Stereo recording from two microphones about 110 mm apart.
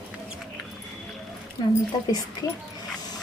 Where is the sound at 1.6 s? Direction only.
45° left (ahead or behind).